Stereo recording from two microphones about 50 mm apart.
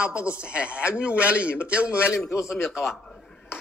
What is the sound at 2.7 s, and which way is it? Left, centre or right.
Speech, centre.